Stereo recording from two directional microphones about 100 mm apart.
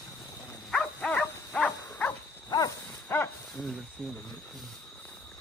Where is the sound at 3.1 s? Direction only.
20° left (ahead or behind).